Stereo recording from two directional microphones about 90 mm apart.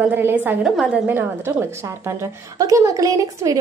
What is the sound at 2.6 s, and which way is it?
Speech, 40° right (ahead or behind).